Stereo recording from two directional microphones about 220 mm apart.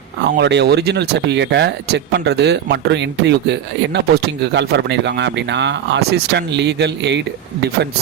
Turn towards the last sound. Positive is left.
turn(degrees=-50)  # may be behind; listen again after turning